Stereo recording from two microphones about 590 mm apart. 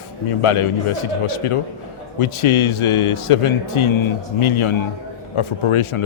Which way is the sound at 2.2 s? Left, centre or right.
Left.